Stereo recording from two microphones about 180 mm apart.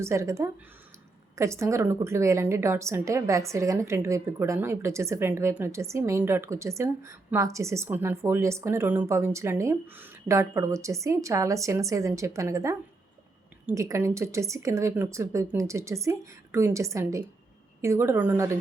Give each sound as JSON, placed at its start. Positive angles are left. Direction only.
{"t": 0.0, "sound": "a woman's voice", "side_deg": -15}